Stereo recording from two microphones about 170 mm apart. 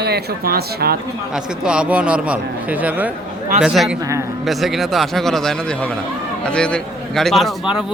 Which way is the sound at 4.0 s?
20° right (ahead or behind).